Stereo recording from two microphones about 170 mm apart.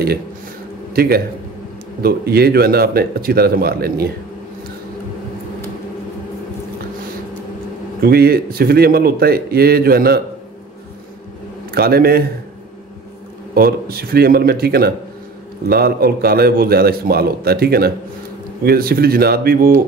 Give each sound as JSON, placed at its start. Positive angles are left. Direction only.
{"t": 0.9, "sound": "a man's voice", "side_deg": -65}
{"t": 8.0, "sound": "a man's voice", "side_deg": -65}
{"t": 11.7, "sound": "a man's voice", "side_deg": -65}
{"t": 13.6, "sound": "a man's voice", "side_deg": -65}